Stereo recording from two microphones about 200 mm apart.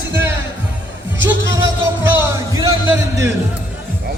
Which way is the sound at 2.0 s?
10° right (ahead or behind).